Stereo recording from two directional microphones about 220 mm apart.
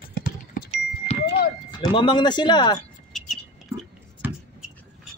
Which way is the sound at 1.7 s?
20° left (ahead or behind).